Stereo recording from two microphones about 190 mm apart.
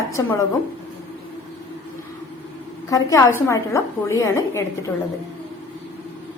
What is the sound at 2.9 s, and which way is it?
A woman's voice, 15° left (ahead or behind).